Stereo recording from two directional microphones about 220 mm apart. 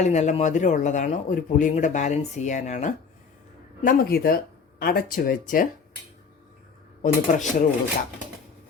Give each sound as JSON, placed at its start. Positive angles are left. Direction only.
{"t": 0.0, "sound": "speech", "side_deg": 30}
{"t": 7.0, "sound": "speech", "side_deg": 35}